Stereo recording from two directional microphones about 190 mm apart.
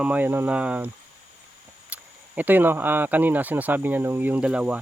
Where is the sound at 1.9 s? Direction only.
10° right (ahead or behind).